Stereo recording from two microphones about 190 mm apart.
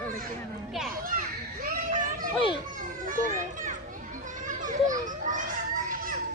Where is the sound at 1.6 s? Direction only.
45° right (ahead or behind).